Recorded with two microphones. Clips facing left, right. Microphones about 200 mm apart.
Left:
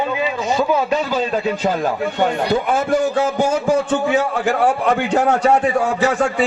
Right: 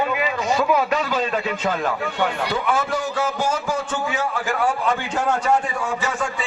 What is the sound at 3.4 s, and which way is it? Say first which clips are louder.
A man's voice: left 7 dB; 55° left (ahead or behind).